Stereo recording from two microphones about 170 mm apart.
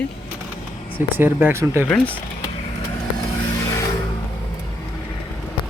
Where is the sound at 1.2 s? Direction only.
10° right (ahead or behind).